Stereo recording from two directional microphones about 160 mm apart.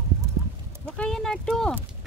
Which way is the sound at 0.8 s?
5° left (ahead or behind).